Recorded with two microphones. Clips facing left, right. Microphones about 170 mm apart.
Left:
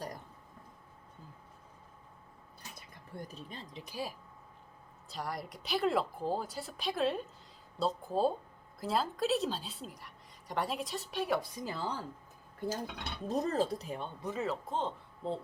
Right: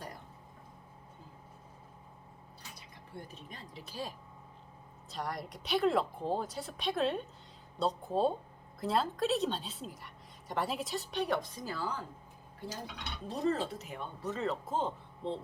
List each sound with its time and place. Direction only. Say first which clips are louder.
3.2 s speech: left 3 dB; 35° left (ahead or behind); by 4.1 s 15° left (ahead or behind)
5.0 s speech: right 1 dB; centre (ahead or behind); by 12.0 s 30° left (ahead or behind)
13.2 s speech: left 1 dB; 40° left (ahead or behind)
14.2 s speech: right 2 dB; 10° left (ahead or behind)